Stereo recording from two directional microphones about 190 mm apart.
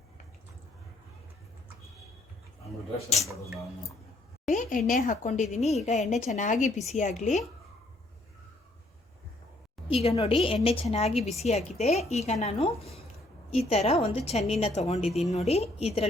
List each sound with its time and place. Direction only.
4.4 s a sound: 40° left (ahead or behind)
4.9 s a woman's voice: 45° left (ahead or behind)
9.9 s a woman's voice: 35° left (ahead or behind)